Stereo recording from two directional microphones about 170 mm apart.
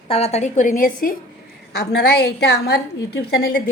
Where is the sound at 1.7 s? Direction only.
70° left (ahead or behind).